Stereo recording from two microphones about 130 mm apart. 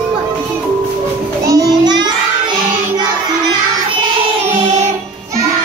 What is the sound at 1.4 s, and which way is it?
Child singing, 30° right (ahead or behind).